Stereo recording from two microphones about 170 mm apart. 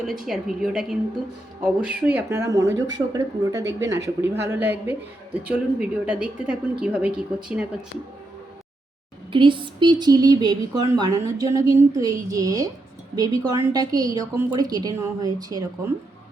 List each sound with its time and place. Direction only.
0.0 s a woman's voice: centre (ahead or behind)
9.3 s a woman's voice: 30° right (ahead or behind)